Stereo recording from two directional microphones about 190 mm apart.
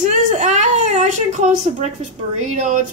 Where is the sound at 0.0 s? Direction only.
40° right (ahead or behind).